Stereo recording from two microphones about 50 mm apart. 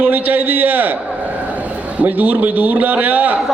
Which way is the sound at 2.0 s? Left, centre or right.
Right.